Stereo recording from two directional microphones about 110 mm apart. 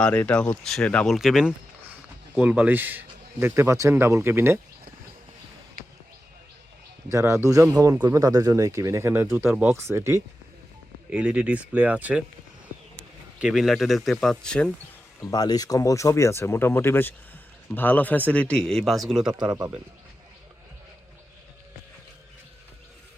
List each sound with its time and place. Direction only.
0.0 s speech: 15° left (ahead or behind)
1.1 s speech: 5° right (ahead or behind); by 4.6 s 20° right (ahead or behind)
7.1 s speech: 25° right (ahead or behind)
11.1 s speech: 10° right (ahead or behind)
13.4 s speech: centre (ahead or behind)
15.2 s speech: 40° left (ahead or behind); by 19.4 s 5° right (ahead or behind)
19.4 s speech: 40° right (ahead or behind)